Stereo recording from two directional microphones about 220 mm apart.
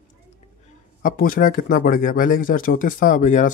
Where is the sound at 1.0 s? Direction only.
40° left (ahead or behind).